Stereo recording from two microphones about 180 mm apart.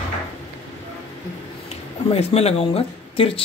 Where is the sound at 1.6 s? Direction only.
35° left (ahead or behind).